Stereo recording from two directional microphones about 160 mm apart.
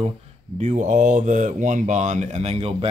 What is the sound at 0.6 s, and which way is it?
Speech, 50° right (ahead or behind).